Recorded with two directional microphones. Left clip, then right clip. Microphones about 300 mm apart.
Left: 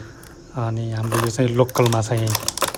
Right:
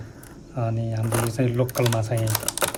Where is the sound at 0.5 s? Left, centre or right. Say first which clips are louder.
Left 1 dB; centre.